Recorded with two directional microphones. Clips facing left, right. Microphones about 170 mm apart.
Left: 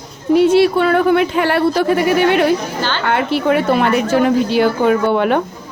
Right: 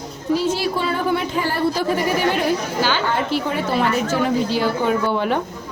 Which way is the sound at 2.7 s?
10° right (ahead or behind).